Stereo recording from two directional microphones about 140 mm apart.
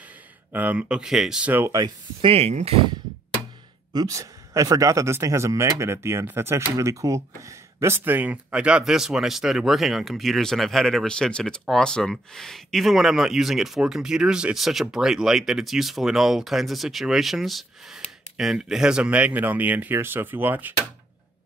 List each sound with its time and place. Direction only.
0.5 s speech: 10° right (ahead or behind)
1.5 s speech: 20° right (ahead or behind)
2.2 s speech: 45° right (ahead or behind)
3.9 s a man's voice: 25° right (ahead or behind)